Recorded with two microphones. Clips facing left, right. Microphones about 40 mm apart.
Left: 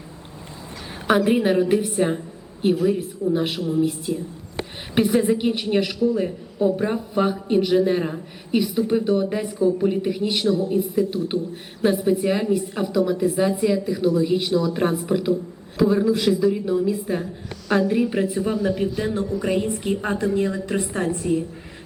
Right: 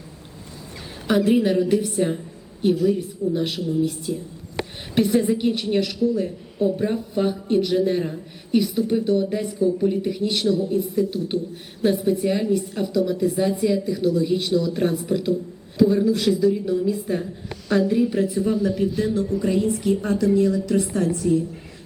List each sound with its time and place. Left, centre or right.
1.0 s a woman's voice: left
3.6 s speech: left
3.8 s a woman's voice: centre
9.6 s a woman's voice: left
9.9 s a woman's voice: centre
14.8 s a woman's voice: left
15.8 s a woman's voice: centre; by 21.4 s left